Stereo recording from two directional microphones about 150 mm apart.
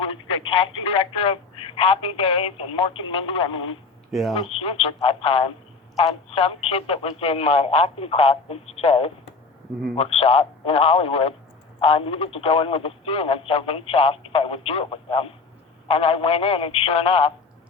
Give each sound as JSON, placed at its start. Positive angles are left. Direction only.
{"t": 0.0, "sound": "speech", "side_deg": 35}
{"t": 4.1, "sound": "speech", "side_deg": 0}
{"t": 4.6, "sound": "speech", "side_deg": 40}